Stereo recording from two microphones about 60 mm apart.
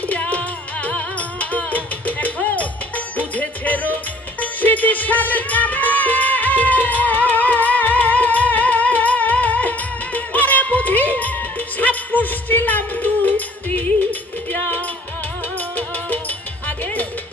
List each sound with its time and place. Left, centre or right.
0.0 s music: left
16.6 s music: left